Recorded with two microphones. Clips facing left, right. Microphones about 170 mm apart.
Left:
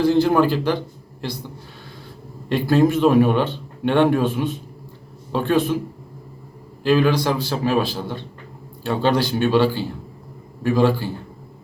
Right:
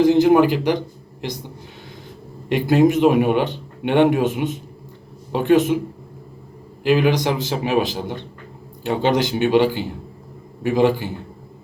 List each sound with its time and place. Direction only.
0.0 s a man's voice: 15° right (ahead or behind)
2.5 s a man's voice: 15° right (ahead or behind)
6.8 s a man's voice: 15° right (ahead or behind)